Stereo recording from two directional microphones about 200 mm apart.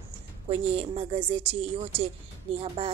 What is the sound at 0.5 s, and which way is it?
Speech, 25° right (ahead or behind).